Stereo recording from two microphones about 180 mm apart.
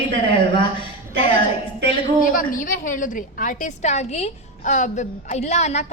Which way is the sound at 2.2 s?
50° left (ahead or behind).